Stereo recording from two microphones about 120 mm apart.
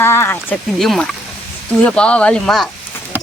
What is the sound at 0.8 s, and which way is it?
Speech, centre (ahead or behind).